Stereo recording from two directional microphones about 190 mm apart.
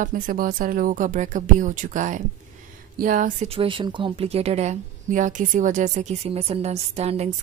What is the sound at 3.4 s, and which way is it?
Speech, 30° right (ahead or behind).